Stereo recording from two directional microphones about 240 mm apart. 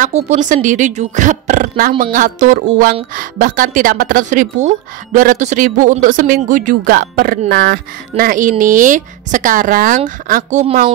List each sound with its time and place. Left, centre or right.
0.0 s a woman's voice: right